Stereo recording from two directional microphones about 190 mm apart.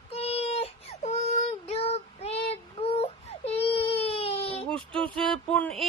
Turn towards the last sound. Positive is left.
turn(degrees=5)  # may be behind; listen again after turning